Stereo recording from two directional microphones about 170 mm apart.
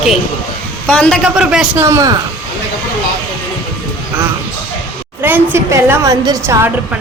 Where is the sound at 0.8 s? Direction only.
5° left (ahead or behind).